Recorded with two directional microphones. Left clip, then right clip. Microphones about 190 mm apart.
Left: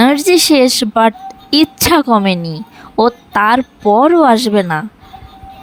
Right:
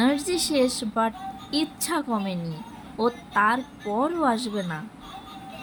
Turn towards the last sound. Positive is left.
turn(degrees=55)  # may be behind; listen again after turning